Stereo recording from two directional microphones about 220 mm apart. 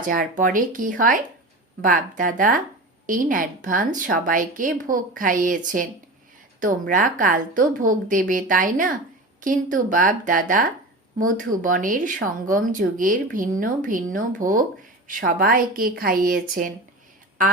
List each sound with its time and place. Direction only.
0.0 s speech: 40° right (ahead or behind)